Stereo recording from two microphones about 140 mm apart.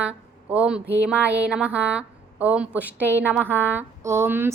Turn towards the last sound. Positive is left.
turn(degrees=-15)  # may be behind; listen again after turning